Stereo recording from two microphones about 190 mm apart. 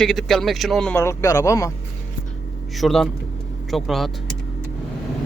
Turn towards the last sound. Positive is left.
turn(degrees=0)  # may be behind; listen again after turning